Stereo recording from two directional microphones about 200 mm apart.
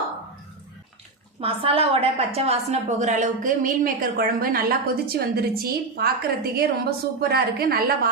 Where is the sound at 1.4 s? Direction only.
30° right (ahead or behind).